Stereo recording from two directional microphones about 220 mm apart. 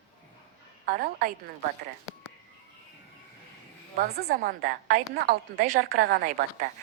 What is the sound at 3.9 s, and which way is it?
A woman's voice, 45° right (ahead or behind).